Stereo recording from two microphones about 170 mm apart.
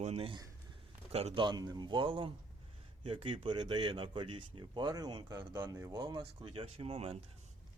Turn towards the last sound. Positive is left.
turn(degrees=-35)  # may be behind; listen again after turning